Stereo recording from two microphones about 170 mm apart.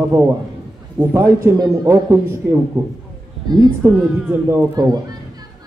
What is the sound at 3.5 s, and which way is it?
A man's voice, 25° right (ahead or behind).